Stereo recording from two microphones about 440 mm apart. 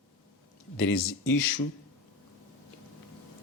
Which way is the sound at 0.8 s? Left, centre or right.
Left.